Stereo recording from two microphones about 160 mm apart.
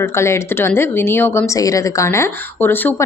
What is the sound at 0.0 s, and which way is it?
A woman's voice, 15° left (ahead or behind).